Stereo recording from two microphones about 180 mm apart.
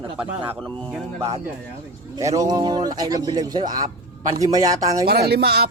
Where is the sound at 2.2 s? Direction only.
20° right (ahead or behind).